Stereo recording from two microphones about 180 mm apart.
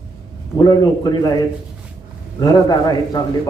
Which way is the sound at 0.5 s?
20° left (ahead or behind).